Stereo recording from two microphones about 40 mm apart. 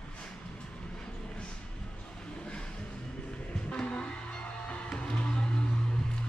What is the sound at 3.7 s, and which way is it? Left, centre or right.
Music, left.